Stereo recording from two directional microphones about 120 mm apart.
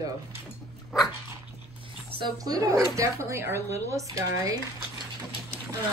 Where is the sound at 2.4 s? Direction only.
30° right (ahead or behind).